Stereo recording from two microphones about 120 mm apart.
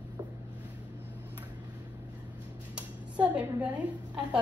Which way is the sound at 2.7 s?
10° right (ahead or behind).